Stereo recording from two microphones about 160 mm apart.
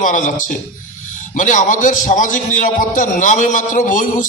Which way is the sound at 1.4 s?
55° left (ahead or behind).